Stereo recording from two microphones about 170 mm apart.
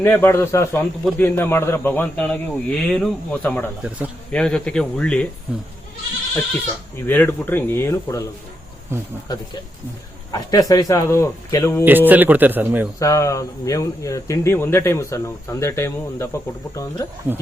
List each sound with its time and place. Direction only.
0.0 s speech: 10° left (ahead or behind)
3.8 s speech: 10° right (ahead or behind)
4.3 s speech: 5° left (ahead or behind)
7.0 s speech: 10° left (ahead or behind)
9.3 s speech: 25° left (ahead or behind)
11.9 s speech: 10° right (ahead or behind)
13.0 s speech: 20° left (ahead or behind)
17.3 s speech: 10° right (ahead or behind)